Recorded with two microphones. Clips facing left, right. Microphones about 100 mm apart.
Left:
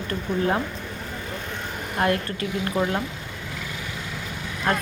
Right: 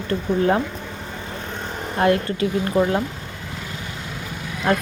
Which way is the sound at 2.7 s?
10° right (ahead or behind).